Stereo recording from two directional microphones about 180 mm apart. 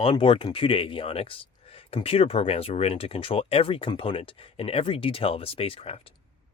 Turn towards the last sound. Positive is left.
turn(degrees=30)  # may be behind; listen again after turning